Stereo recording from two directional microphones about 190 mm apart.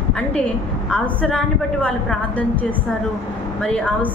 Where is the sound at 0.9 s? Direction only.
5° left (ahead or behind).